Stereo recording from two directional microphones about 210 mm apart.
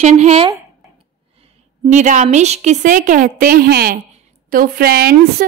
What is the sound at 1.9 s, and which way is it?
A woman's voice, 35° right (ahead or behind).